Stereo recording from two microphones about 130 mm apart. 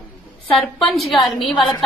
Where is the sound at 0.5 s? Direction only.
Centre (ahead or behind).